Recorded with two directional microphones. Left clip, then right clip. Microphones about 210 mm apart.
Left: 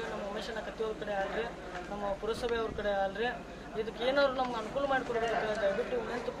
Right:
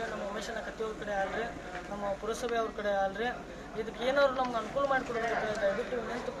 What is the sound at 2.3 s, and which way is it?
A woman's voice, centre (ahead or behind).